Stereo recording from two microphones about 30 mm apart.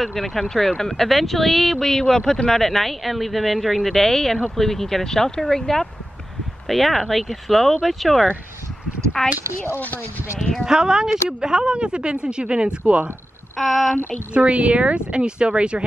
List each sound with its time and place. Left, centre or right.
0.0 s speech: centre
1.0 s speech: centre
6.7 s speech: centre
9.2 s speech: left
10.7 s speech: right
12.8 s speech: right
13.6 s speech: centre
14.3 s speech: right